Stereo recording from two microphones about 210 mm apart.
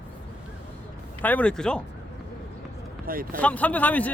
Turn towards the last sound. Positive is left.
turn(degrees=5)  # may be behind; listen again after turning